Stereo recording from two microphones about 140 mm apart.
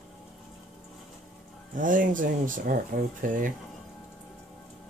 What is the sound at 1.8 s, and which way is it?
Speech, 70° right (ahead or behind).